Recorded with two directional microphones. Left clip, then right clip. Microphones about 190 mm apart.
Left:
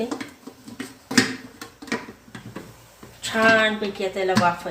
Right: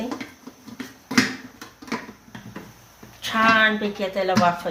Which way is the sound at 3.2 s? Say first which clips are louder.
Even; 35° right (ahead or behind).